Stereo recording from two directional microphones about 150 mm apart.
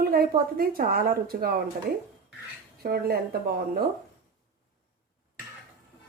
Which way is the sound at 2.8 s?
90° right.